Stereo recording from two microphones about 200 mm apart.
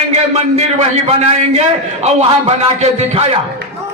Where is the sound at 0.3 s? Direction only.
30° right (ahead or behind).